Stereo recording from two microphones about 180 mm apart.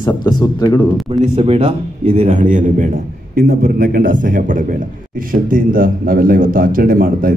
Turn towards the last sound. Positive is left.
turn(degrees=-50)  # may be behind; listen again after turning